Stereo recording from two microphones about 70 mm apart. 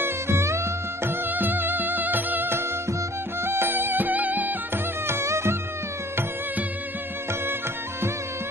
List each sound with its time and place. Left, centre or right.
0.0 s music: right
1.3 s music: right